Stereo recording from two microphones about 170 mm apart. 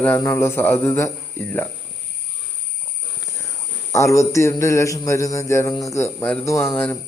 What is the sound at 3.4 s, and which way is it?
A man's voice, 15° left (ahead or behind).